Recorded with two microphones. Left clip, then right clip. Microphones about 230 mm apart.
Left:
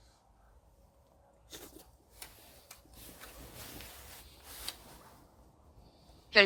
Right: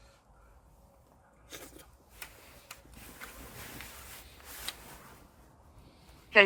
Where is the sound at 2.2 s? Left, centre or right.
Right.